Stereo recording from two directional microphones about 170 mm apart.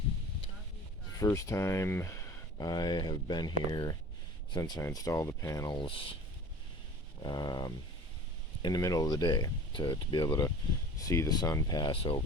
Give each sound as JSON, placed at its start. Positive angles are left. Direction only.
{"t": 1.2, "sound": "speech", "side_deg": 20}
{"t": 7.3, "sound": "speech", "side_deg": 25}